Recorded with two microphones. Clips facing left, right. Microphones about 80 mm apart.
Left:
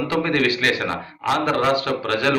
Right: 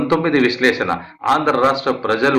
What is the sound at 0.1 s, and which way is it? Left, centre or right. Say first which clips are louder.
A man's voice: right 6 dB; right.